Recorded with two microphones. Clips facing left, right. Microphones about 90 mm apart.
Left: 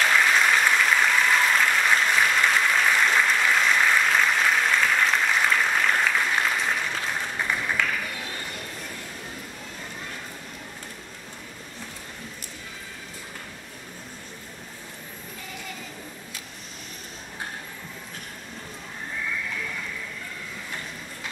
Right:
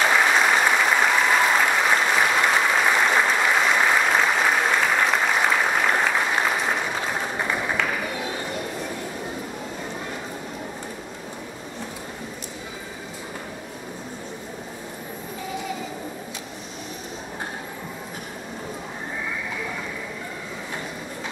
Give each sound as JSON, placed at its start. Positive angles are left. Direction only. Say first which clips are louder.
{"t": 0.0, "sound": "applause", "louder": "right 2 dB", "side_deg": -20}